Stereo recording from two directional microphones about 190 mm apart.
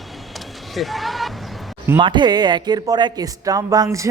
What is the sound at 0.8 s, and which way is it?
Basketball bounce, centre (ahead or behind).